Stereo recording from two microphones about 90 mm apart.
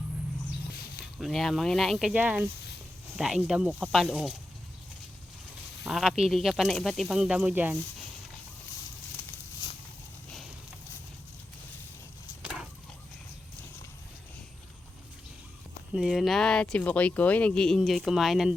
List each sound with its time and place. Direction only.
1.0 s speech: centre (ahead or behind)
2.1 s speech: 15° right (ahead or behind)
3.2 s speech: 5° right (ahead or behind)
5.8 s speech: 5° right (ahead or behind)
7.1 s speech: 10° right (ahead or behind)
16.0 s speech: centre (ahead or behind)